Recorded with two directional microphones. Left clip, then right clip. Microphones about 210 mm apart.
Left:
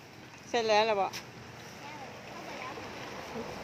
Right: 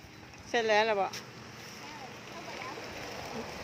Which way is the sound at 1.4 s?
50° right (ahead or behind).